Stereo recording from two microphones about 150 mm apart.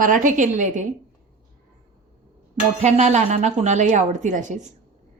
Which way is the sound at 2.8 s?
50° right (ahead or behind).